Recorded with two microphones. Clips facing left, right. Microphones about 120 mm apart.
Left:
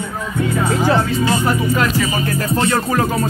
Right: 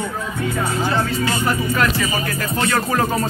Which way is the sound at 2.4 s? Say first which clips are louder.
Left 6 dB; 25° left (ahead or behind).